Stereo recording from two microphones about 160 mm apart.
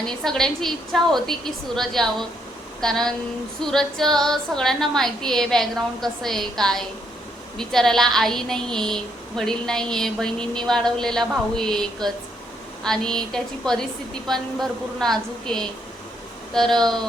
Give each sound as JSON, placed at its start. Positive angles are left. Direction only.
{"t": 0.1, "sound": "a woman's voice", "side_deg": 5}